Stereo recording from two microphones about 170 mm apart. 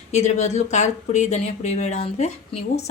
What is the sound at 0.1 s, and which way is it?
Speech, 40° left (ahead or behind).